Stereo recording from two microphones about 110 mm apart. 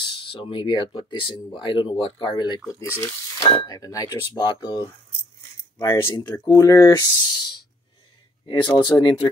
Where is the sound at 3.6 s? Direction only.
35° left (ahead or behind).